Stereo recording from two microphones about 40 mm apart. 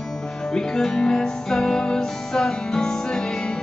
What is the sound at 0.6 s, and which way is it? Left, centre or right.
Music, centre.